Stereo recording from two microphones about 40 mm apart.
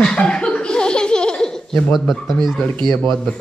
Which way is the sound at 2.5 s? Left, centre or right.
Left.